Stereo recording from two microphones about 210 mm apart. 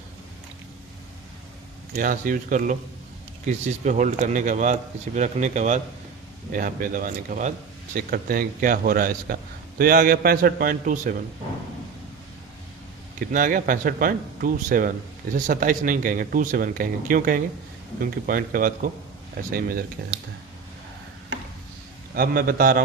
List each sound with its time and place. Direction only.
1.9 s speech: 40° right (ahead or behind)
3.8 s a man's voice: 35° right (ahead or behind)
13.1 s a man's voice: 40° right (ahead or behind)
22.1 s a man's voice: 45° right (ahead or behind)